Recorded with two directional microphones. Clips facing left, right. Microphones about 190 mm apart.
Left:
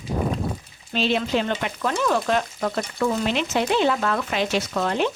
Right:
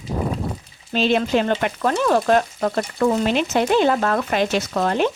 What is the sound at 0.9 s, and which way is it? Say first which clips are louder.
Frying: right 4 dB; 50° right (ahead or behind).